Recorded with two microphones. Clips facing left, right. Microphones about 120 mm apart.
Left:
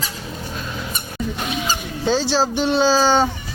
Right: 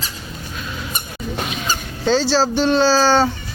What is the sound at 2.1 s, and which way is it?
Speech, 15° left (ahead or behind).